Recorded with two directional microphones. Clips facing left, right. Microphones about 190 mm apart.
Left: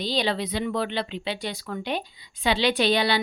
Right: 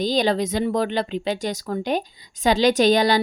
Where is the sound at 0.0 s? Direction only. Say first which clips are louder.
Right 6 dB; 45° right (ahead or behind).